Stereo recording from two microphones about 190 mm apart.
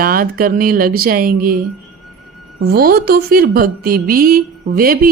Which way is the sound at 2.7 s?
55° right (ahead or behind).